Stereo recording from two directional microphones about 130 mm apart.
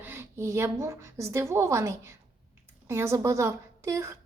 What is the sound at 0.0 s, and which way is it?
A woman's voice, 15° right (ahead or behind).